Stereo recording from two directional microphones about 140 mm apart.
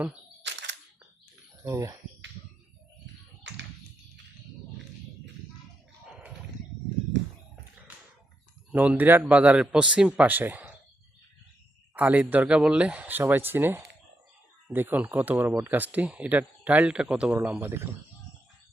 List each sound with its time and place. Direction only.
1.6 s speech: 25° right (ahead or behind)
8.7 s speech: 10° right (ahead or behind)
11.9 s speech: 10° right (ahead or behind)